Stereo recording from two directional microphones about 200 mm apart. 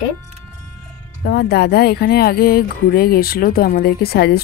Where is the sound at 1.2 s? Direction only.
55° left (ahead or behind).